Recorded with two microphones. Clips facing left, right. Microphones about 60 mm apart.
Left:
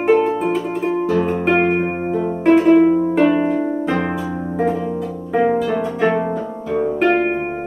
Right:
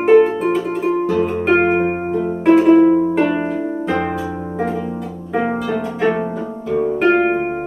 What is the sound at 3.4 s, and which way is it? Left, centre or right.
Music, centre.